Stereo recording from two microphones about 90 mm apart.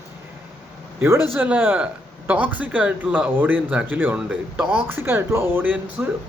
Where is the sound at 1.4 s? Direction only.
20° right (ahead or behind).